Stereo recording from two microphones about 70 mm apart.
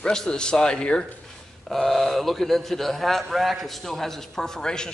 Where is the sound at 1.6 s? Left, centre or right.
Centre.